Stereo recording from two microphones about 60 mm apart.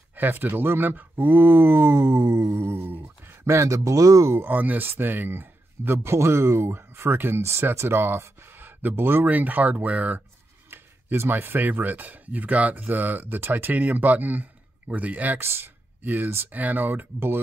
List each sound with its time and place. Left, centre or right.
0.1 s speech: right
4.4 s speech: right
6.1 s speech: right
9.2 s speech: right
10.7 s speech: right